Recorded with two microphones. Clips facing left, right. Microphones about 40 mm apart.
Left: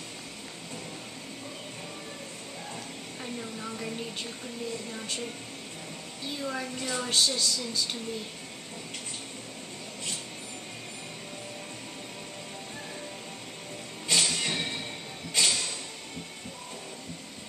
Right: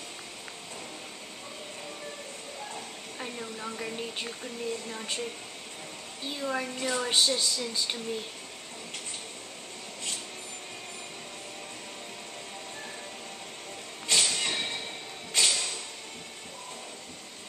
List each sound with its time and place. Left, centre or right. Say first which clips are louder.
3.2 s a woman's voice: right 1 dB; centre
6.2 s a woman's voice: right 2 dB; centre
14.0 s music: even; centre
15.3 s a sound: even; centre